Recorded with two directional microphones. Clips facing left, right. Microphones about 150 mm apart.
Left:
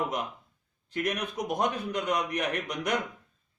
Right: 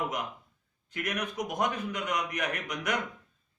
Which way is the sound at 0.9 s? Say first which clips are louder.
Left 3 dB; 30° left (ahead or behind).